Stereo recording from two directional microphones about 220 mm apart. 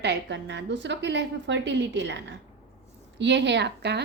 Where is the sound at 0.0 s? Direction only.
50° right (ahead or behind).